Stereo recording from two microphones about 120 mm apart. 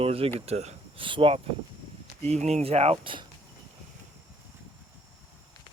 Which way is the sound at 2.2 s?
65° right (ahead or behind).